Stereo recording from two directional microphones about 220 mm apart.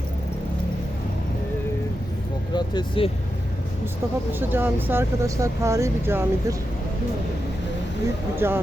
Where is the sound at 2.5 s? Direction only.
20° left (ahead or behind).